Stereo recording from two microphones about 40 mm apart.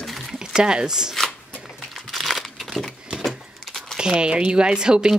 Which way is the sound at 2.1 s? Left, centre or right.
Centre.